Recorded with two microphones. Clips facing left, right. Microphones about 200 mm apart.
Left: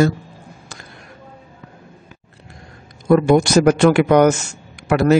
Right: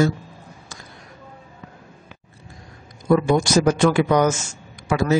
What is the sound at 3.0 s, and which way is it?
A man's voice, 60° left (ahead or behind).